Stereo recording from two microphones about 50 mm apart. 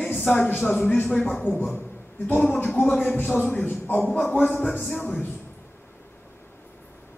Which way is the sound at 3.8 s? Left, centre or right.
Left.